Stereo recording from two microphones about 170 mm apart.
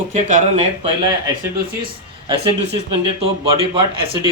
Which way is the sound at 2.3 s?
35° right (ahead or behind).